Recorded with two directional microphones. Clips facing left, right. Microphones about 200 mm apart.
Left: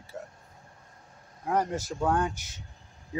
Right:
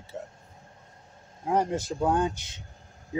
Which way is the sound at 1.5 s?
25° right (ahead or behind).